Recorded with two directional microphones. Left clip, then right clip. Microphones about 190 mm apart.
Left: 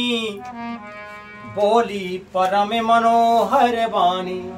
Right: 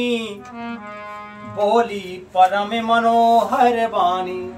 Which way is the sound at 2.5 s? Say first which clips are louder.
Left 2 dB; 20° left (ahead or behind).